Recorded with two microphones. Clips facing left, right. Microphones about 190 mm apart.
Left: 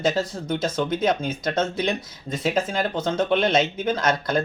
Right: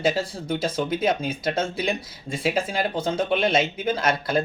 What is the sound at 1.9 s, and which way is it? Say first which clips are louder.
Speech: even; 30° right (ahead or behind).